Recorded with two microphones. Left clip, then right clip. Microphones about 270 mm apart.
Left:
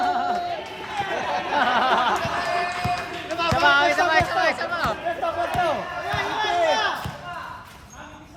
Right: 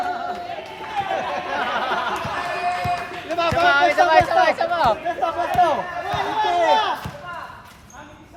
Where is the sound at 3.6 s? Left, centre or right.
Centre.